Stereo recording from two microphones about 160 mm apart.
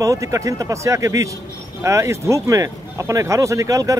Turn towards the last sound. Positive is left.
turn(degrees=-20)  # may be behind; listen again after turning